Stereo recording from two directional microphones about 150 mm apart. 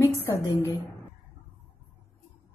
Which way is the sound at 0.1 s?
15° left (ahead or behind).